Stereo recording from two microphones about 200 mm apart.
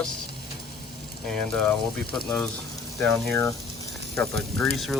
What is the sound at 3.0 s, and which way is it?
Speech, 5° left (ahead or behind).